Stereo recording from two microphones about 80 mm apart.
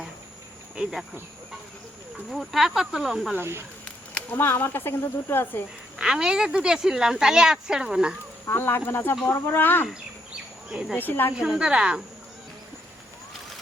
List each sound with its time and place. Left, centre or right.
0.8 s speech: centre
2.1 s speech: centre
3.3 s speech: right
3.8 s a sound: centre
4.4 s speech: left
6.0 s speech: centre
8.4 s speech: left
10.7 s speech: centre
10.9 s speech: left
11.3 s speech: centre